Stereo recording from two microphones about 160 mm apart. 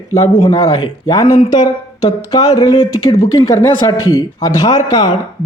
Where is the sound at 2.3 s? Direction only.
20° left (ahead or behind).